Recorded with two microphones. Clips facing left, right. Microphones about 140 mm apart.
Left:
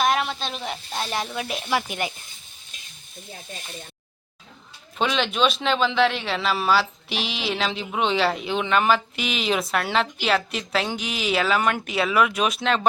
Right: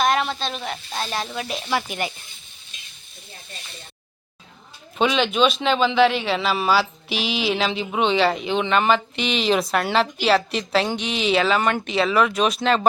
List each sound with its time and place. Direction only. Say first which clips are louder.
0.0 s speech: right 2 dB; 5° left (ahead or behind)
4.9 s a man's voice: right 3 dB; centre (ahead or behind)